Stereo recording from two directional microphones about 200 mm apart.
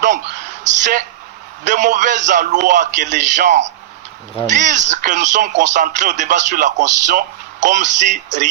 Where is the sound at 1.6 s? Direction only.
40° right (ahead or behind).